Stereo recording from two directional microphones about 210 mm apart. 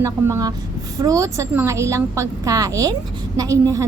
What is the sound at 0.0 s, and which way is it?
A woman's voice, 15° right (ahead or behind).